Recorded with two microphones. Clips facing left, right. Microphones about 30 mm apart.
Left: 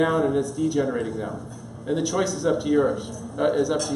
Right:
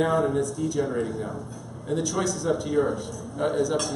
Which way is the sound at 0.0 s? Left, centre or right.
Centre.